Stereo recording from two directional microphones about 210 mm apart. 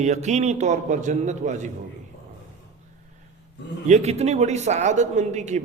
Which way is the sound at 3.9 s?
30° right (ahead or behind).